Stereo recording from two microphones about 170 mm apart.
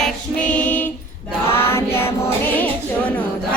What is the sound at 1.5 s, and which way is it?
Music, 15° left (ahead or behind).